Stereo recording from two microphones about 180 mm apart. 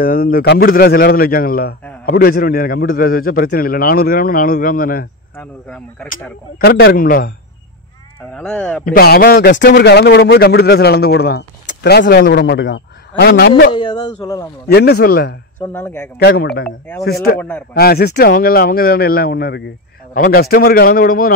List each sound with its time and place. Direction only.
0.0 s a man's voice: 50° left (ahead or behind)
5.4 s speech: 5° left (ahead or behind)
6.6 s a man's voice: 60° left (ahead or behind)
8.4 s speech: 5° left (ahead or behind)
8.8 s a man's voice: 55° left (ahead or behind)
13.7 s speech: 25° left (ahead or behind)
14.7 s a man's voice: 65° left (ahead or behind)
15.7 s speech: 10° left (ahead or behind)
16.2 s a man's voice: 60° left (ahead or behind)
17.4 s speech: 10° left (ahead or behind)
17.7 s a man's voice: 60° left (ahead or behind)